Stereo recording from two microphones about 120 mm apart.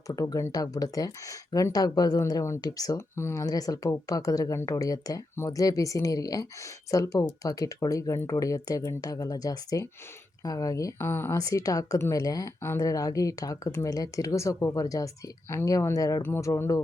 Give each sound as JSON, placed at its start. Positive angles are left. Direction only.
{"t": 0.1, "sound": "speech", "side_deg": 30}